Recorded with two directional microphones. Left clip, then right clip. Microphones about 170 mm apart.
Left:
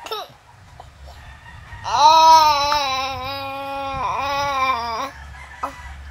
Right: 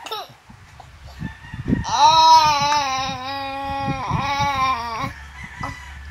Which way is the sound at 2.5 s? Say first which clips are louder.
Left 1 dB; 15° left (ahead or behind).